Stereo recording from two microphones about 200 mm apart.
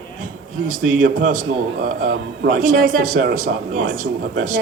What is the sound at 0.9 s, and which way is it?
A man's voice, 40° right (ahead or behind).